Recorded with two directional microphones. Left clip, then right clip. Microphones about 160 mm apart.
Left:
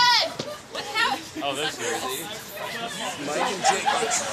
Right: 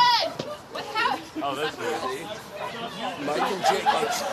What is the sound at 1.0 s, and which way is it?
Children playing, 20° left (ahead or behind).